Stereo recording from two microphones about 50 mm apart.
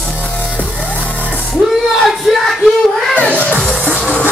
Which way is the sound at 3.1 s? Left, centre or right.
Left.